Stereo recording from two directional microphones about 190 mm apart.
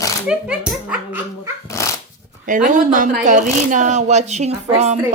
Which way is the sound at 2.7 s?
45° right (ahead or behind).